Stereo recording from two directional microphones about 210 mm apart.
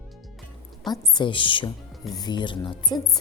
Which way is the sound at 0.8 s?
20° left (ahead or behind).